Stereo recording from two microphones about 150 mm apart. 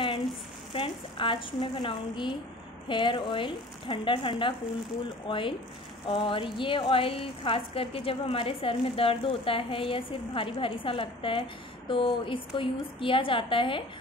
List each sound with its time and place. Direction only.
0.7 s a woman's voice: 35° left (ahead or behind)